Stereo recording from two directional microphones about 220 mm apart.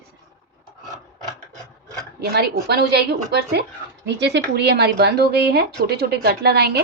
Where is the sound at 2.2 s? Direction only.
45° right (ahead or behind).